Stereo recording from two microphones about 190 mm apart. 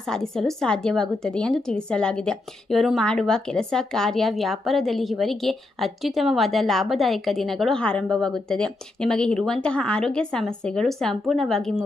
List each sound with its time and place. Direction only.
0.0 s a woman's voice: centre (ahead or behind)